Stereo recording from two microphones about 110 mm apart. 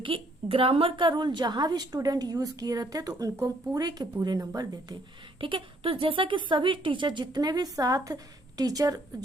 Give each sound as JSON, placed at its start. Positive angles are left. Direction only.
{"t": 0.0, "sound": "a woman's voice", "side_deg": -55}
{"t": 5.4, "sound": "a woman's voice", "side_deg": -50}